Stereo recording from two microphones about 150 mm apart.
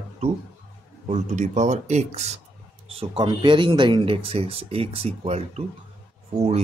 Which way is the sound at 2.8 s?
35° right (ahead or behind).